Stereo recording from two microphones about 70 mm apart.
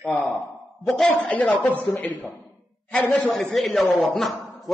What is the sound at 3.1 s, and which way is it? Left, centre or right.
Speech, centre.